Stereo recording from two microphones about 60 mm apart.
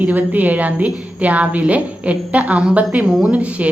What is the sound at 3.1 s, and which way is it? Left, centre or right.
Speech, centre.